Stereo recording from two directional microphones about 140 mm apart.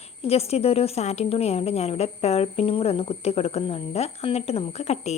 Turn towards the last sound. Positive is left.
turn(degrees=50)  # may be behind; listen again after turning